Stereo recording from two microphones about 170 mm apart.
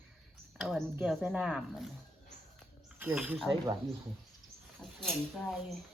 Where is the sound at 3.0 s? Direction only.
10° right (ahead or behind).